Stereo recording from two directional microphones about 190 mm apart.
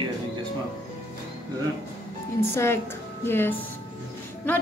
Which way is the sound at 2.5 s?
15° left (ahead or behind).